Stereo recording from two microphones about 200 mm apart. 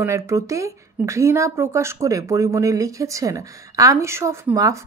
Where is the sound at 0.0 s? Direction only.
15° right (ahead or behind).